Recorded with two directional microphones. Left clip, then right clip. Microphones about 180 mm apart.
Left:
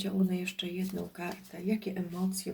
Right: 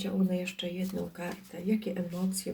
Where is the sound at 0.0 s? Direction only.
25° left (ahead or behind).